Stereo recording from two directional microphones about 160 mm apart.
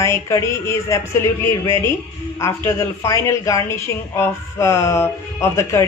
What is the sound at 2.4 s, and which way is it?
Speech, 15° left (ahead or behind).